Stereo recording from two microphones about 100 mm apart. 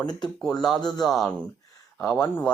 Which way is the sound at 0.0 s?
40° left (ahead or behind).